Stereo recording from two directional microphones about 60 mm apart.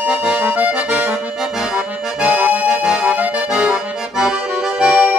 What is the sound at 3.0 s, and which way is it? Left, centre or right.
Accordion, right.